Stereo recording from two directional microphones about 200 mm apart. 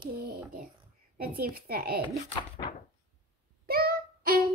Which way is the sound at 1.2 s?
50° right (ahead or behind).